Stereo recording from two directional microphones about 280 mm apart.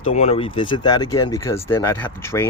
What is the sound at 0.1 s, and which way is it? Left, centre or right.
Speech, left.